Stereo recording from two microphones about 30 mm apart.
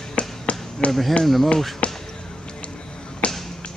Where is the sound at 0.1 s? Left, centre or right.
Left.